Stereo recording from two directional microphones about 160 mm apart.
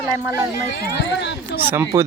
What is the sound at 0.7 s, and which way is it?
Speech, 90° left.